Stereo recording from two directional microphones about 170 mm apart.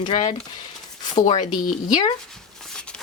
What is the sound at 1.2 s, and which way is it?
Speech, 25° left (ahead or behind).